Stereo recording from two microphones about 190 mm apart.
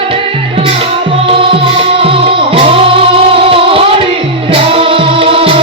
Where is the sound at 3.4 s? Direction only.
30° right (ahead or behind).